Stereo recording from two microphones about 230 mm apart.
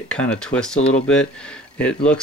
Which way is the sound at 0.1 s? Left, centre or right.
Centre.